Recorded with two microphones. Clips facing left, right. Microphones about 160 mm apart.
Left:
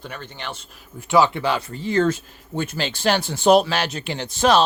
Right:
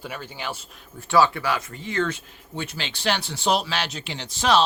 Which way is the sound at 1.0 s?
20° left (ahead or behind).